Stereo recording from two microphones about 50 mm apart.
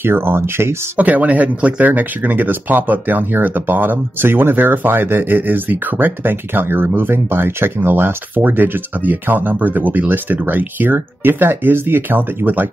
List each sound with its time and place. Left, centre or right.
0.0 s speech: right
0.9 s speech: right